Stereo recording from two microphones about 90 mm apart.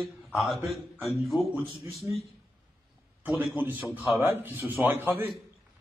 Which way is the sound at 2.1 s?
30° right (ahead or behind).